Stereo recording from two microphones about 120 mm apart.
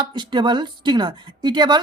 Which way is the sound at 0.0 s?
40° right (ahead or behind).